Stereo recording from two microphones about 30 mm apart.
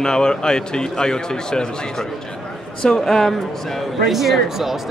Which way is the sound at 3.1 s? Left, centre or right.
Centre.